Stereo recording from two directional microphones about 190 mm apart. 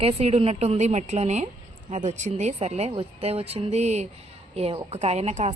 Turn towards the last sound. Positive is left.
turn(degrees=-35)  # may be behind; listen again after turning